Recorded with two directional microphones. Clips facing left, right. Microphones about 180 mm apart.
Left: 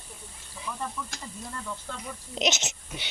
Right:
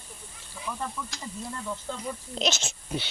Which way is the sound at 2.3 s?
20° left (ahead or behind).